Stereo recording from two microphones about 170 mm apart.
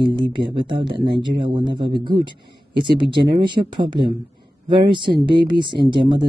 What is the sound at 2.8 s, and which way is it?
Speech, 30° right (ahead or behind).